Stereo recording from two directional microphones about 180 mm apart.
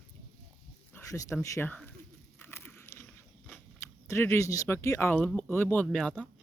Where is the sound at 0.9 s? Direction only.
15° left (ahead or behind).